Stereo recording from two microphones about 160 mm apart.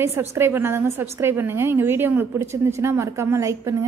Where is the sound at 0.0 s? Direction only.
15° right (ahead or behind).